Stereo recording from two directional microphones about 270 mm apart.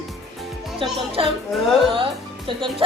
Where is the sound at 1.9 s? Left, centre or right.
Centre.